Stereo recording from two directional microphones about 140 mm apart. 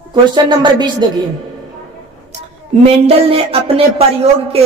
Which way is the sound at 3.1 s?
45° right (ahead or behind).